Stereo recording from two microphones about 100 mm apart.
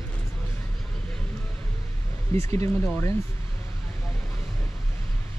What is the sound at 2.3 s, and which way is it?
Speech, 30° left (ahead or behind).